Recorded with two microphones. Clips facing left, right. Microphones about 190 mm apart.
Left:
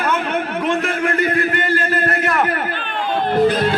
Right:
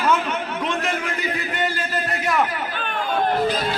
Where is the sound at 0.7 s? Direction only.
55° left (ahead or behind).